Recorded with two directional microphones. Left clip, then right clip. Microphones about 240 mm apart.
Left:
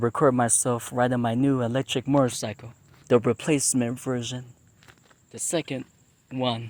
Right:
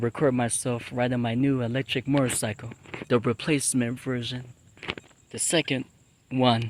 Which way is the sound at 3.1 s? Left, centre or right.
Centre.